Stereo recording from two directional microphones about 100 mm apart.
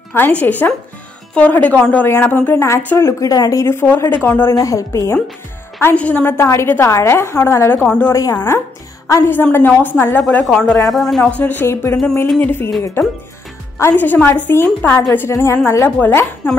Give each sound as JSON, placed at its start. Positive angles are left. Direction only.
{"t": 0.1, "sound": "a woman's voice", "side_deg": 20}
{"t": 3.6, "sound": "a woman's voice", "side_deg": 20}
{"t": 5.8, "sound": "a woman's voice", "side_deg": 20}
{"t": 6.3, "sound": "a woman's voice", "side_deg": 25}
{"t": 7.8, "sound": "a woman's voice", "side_deg": 10}
{"t": 8.1, "sound": "a woman's voice", "side_deg": 30}
{"t": 9.0, "sound": "a woman's voice", "side_deg": 20}
{"t": 10.4, "sound": "speech", "side_deg": 5}
{"t": 11.3, "sound": "a woman's voice", "side_deg": 20}